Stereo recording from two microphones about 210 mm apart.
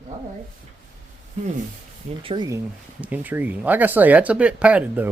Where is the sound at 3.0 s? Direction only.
10° right (ahead or behind).